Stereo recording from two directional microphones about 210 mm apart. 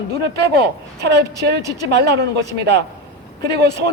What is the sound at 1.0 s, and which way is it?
A man's voice, 55° right (ahead or behind).